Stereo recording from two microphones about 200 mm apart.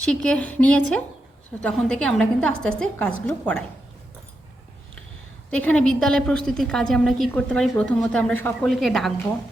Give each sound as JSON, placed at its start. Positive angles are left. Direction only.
{"t": 0.0, "sound": "a woman's voice", "side_deg": 5}
{"t": 5.5, "sound": "a woman's voice", "side_deg": 5}